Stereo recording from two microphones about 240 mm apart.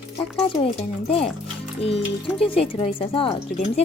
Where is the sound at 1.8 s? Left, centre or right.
Left.